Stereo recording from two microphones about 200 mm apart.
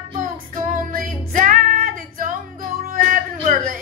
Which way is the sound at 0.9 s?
45° right (ahead or behind).